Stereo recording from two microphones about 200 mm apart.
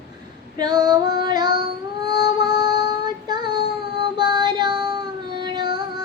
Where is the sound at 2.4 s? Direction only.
20° right (ahead or behind).